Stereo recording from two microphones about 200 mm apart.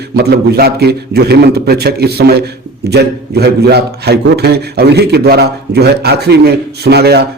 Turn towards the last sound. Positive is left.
turn(degrees=-55)  # may be behind; listen again after turning